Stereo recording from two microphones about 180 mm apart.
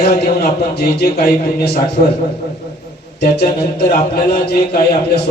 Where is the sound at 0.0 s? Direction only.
60° left (ahead or behind).